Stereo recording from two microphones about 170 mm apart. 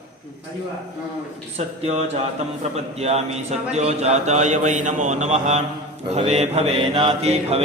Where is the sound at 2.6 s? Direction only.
35° right (ahead or behind).